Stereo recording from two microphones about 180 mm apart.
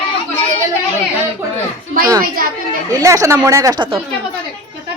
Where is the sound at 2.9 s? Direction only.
20° right (ahead or behind).